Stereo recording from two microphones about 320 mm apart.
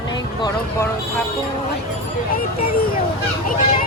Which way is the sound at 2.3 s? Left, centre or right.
Left.